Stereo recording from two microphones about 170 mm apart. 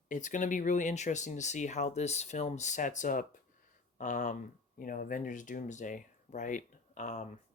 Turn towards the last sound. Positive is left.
turn(degrees=45)  # may be behind; listen again after turning